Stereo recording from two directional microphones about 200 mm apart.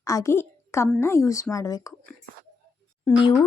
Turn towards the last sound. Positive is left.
turn(degrees=20)  # may be behind; listen again after turning